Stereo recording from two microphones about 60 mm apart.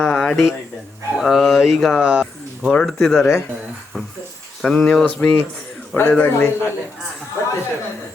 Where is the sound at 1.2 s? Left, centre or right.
Centre.